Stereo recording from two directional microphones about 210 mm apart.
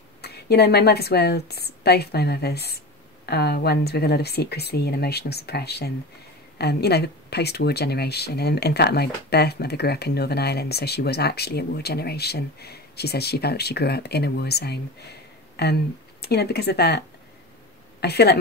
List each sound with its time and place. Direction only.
0.2 s speech: 50° left (ahead or behind)
18.0 s speech: 50° left (ahead or behind)